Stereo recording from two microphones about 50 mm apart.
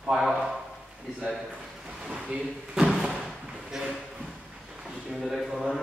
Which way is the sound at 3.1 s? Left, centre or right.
Centre.